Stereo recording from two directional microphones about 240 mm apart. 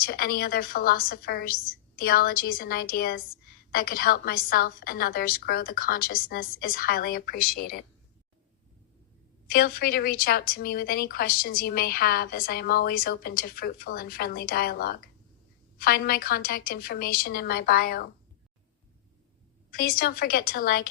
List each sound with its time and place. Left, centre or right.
0.0 s a woman's voice: left
9.5 s a woman's voice: left
19.7 s a woman's voice: left